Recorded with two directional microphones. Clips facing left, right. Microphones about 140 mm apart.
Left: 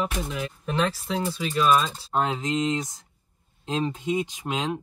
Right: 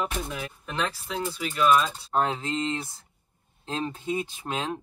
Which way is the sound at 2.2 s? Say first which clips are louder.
Left 1 dB; 15° left (ahead or behind).